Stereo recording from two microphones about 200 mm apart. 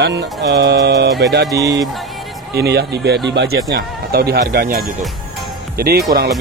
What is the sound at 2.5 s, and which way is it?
Speech, 55° right (ahead or behind).